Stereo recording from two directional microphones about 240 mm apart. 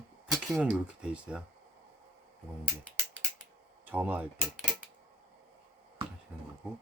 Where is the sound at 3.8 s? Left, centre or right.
Centre.